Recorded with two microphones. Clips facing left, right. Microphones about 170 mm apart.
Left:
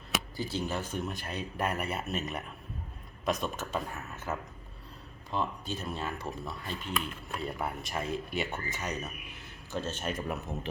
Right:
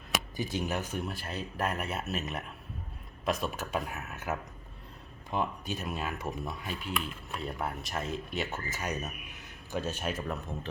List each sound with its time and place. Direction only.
0.3 s speech: 15° right (ahead or behind)
1.0 s speech: 5° right (ahead or behind); by 6.7 s 20° right (ahead or behind)
6.8 s speech: centre (ahead or behind)
10.2 s speech: 10° left (ahead or behind)